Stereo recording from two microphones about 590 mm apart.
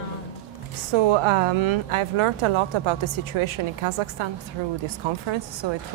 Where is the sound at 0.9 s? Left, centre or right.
Right.